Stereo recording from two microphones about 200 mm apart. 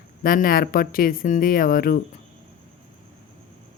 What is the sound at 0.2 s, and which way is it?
A woman's voice, 45° left (ahead or behind).